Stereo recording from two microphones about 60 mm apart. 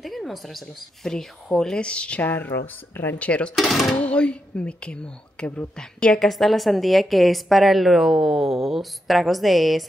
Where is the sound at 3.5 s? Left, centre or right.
Centre.